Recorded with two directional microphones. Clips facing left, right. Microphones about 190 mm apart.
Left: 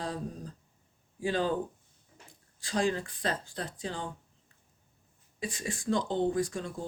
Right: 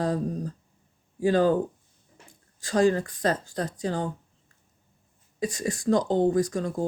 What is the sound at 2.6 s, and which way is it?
Speech, 45° right (ahead or behind).